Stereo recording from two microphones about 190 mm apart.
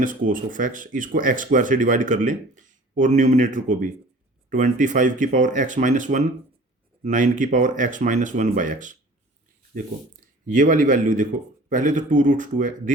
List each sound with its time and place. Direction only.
0.0 s speech: 45° right (ahead or behind)